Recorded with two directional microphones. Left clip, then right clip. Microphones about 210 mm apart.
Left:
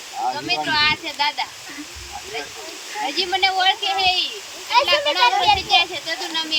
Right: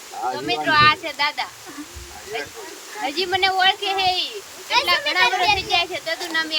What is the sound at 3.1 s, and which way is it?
Speech, 10° right (ahead or behind).